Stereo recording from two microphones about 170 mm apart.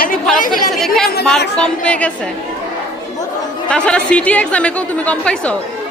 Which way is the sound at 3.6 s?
5° left (ahead or behind).